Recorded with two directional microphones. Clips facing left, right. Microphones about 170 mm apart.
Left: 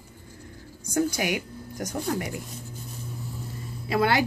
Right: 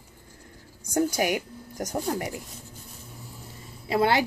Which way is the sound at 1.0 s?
40° right (ahead or behind).